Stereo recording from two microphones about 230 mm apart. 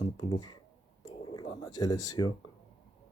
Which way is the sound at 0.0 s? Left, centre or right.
Centre.